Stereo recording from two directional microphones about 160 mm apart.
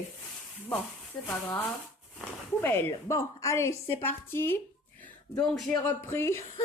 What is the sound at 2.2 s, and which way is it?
Speech, 10° left (ahead or behind).